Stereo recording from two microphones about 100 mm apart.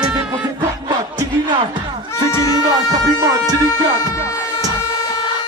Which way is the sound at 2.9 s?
40° right (ahead or behind).